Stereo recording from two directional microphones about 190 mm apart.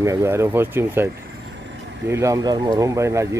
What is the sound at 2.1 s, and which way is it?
Speech, 15° right (ahead or behind).